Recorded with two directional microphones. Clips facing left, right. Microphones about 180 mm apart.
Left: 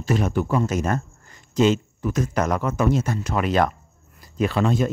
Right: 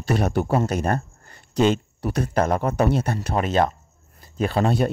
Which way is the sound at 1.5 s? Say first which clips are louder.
Left 1 dB; 65° right (ahead or behind).